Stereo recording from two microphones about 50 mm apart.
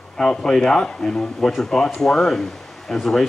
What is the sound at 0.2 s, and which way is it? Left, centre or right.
A woman's voice, centre.